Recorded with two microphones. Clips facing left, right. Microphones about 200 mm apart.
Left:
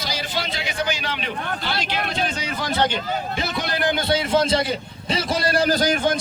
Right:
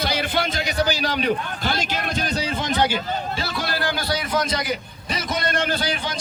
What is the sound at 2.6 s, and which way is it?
Speech, 15° right (ahead or behind).